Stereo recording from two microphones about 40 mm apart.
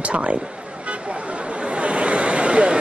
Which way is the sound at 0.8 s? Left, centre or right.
Right.